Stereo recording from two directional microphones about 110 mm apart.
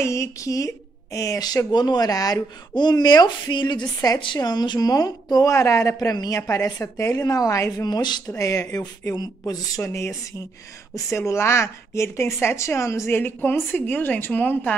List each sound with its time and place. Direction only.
0.0 s speech: 25° left (ahead or behind)
8.3 s a woman's voice: 30° left (ahead or behind)
9.8 s a woman's voice: 20° left (ahead or behind)